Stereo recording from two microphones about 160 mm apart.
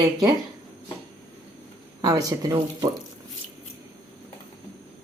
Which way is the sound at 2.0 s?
20° right (ahead or behind).